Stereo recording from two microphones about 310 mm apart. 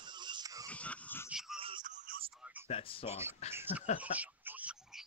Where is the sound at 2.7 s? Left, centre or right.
Centre.